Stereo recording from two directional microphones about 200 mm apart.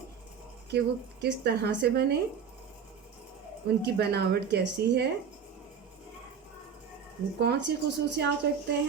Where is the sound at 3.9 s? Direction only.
55° right (ahead or behind).